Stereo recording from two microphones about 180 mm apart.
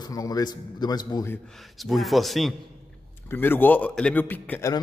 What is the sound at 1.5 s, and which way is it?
A man's voice, centre (ahead or behind).